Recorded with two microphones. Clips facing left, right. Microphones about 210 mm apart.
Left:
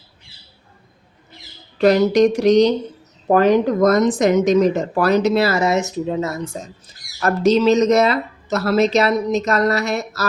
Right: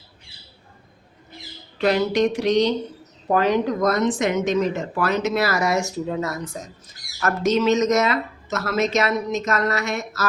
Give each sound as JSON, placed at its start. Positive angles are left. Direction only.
{"t": 1.8, "sound": "speech", "side_deg": 40}